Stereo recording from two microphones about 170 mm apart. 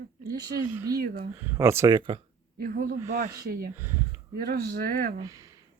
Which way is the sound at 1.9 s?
30° right (ahead or behind).